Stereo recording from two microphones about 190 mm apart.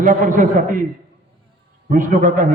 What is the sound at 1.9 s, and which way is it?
Speech, 45° right (ahead or behind).